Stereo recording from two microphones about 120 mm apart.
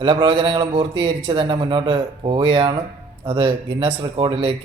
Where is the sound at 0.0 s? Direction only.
40° right (ahead or behind).